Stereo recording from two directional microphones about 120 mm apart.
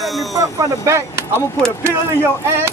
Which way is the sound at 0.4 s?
25° right (ahead or behind).